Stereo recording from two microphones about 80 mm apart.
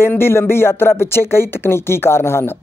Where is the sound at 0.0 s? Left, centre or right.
Left.